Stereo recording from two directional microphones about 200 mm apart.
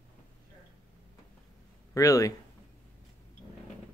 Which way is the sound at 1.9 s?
15° left (ahead or behind).